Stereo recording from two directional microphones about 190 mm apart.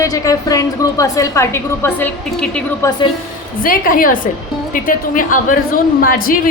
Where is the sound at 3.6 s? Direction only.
45° left (ahead or behind).